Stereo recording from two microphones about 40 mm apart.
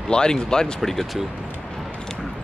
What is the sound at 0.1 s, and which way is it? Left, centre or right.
Speech, centre.